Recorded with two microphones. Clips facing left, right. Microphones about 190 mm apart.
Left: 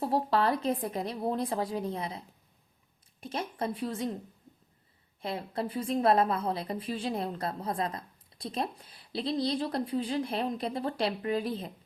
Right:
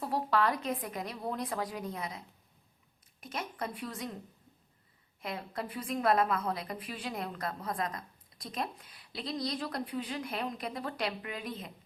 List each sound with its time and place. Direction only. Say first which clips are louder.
0.0 s a woman's voice: left 3 dB; 30° left (ahead or behind)
5.2 s a woman's voice: left 5 dB; 30° left (ahead or behind)